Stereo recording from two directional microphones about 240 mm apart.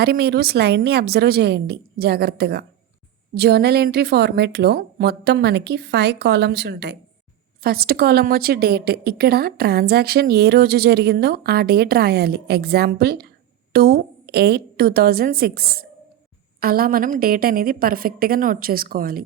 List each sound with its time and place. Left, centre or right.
0.0 s a woman's voice: right